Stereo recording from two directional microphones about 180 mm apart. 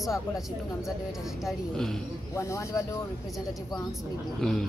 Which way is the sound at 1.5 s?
Centre (ahead or behind).